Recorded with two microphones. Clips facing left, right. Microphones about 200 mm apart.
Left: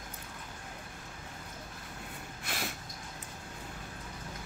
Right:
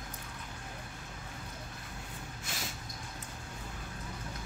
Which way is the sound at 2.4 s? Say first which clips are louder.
Left 5 dB; 60° left (ahead or behind).